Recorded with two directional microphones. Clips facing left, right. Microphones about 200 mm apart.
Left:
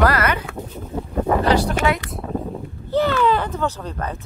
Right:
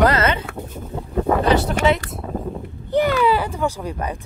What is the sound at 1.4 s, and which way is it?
Speech, 25° right (ahead or behind).